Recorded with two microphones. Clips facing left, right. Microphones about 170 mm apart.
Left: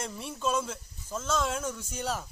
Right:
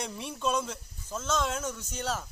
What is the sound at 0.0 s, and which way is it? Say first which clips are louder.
Speech: even; centre (ahead or behind).